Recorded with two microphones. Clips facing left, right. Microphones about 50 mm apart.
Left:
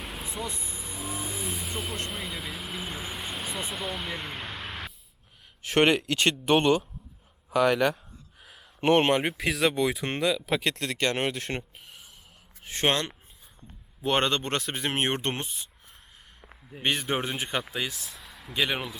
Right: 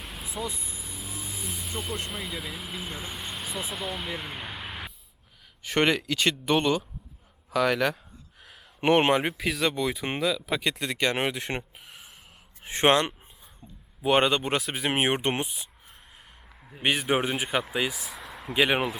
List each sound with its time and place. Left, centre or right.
0.0 s vehicle: centre
5.6 s speech: centre
8.4 s a sound: centre
8.8 s speech: centre
9.2 s speech: centre
12.6 s speech: right
14.0 s speech: centre
16.8 s speech: centre
18.2 s a sound: right
18.5 s speech: centre